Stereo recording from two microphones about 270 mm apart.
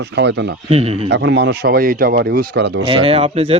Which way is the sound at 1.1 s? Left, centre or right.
Right.